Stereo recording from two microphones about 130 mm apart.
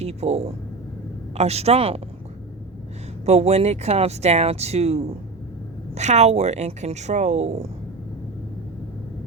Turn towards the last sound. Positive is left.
turn(degrees=-60)  # may be behind; listen again after turning